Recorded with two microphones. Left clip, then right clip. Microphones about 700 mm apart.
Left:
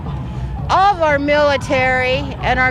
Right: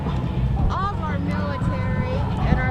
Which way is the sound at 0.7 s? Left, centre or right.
Left.